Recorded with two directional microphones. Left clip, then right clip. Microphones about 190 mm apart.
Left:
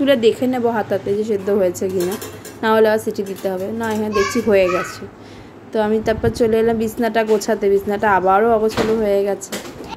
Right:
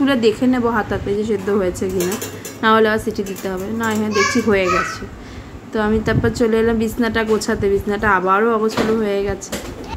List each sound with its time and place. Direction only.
0.0 s a woman's voice: 10° left (ahead or behind)
5.7 s a woman's voice: 5° left (ahead or behind)